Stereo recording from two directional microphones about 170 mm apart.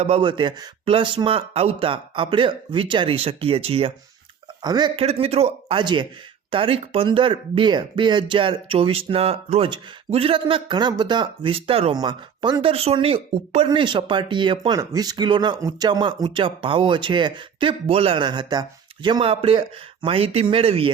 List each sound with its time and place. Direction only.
0.0 s speech: 30° right (ahead or behind)
5.0 s speech: 35° right (ahead or behind)